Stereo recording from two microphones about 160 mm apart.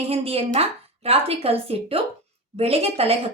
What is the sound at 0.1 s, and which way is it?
A woman's voice, 40° right (ahead or behind).